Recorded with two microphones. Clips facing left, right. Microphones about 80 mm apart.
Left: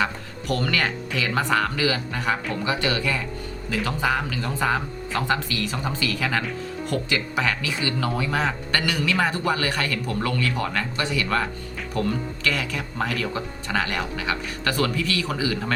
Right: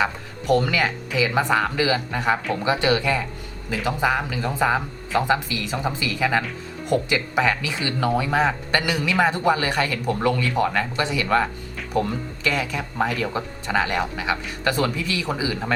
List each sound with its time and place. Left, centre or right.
0.0 s speech: right